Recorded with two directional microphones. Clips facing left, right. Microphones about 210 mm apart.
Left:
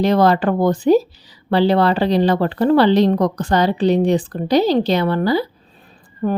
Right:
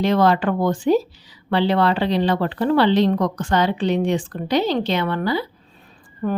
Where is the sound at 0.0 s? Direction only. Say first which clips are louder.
Left 3 dB; 40° left (ahead or behind).